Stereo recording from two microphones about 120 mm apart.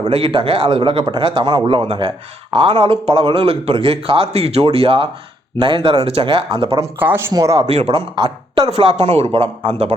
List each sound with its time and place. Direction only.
0.0 s speech: 50° right (ahead or behind)
7.0 s speech: 20° right (ahead or behind)
7.7 s speech: 60° right (ahead or behind)
8.1 s a woman's voice: 40° right (ahead or behind)
8.7 s speech: 60° right (ahead or behind)